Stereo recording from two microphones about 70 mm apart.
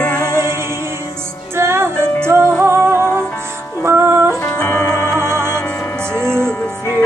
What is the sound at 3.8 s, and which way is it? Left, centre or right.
Music, right.